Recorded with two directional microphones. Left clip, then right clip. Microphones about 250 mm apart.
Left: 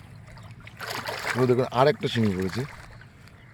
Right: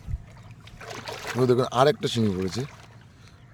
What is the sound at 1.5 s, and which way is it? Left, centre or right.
Speech, centre.